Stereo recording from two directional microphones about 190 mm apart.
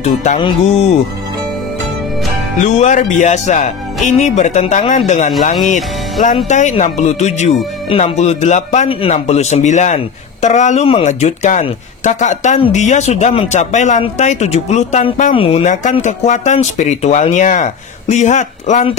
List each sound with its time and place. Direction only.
0.0 s a man's voice: 40° left (ahead or behind)
0.4 s speech: 25° left (ahead or behind)
2.6 s a man's voice: 40° left (ahead or behind)